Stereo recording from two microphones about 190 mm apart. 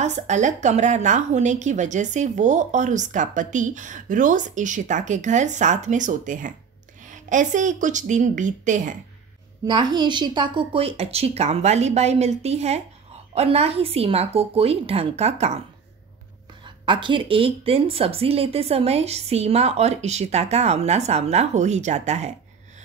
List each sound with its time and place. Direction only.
0.0 s a woman's voice: 40° right (ahead or behind)
9.7 s a woman's voice: 25° right (ahead or behind)
16.6 s a woman's voice: 25° right (ahead or behind)